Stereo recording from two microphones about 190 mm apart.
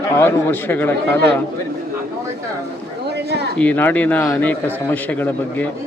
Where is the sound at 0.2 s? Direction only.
10° left (ahead or behind).